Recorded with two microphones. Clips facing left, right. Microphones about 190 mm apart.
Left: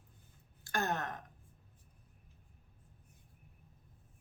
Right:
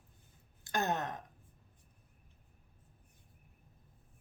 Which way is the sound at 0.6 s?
20° right (ahead or behind).